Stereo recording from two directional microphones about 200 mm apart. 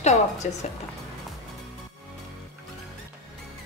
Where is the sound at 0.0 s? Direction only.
35° left (ahead or behind).